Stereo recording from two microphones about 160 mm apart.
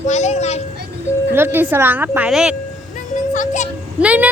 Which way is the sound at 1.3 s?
15° right (ahead or behind).